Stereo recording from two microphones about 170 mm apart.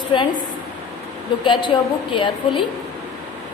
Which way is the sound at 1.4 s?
30° left (ahead or behind).